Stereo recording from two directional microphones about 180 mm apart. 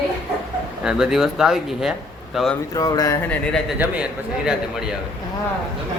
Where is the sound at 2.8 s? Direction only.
20° left (ahead or behind).